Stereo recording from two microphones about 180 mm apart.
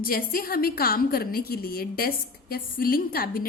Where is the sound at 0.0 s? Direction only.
55° left (ahead or behind).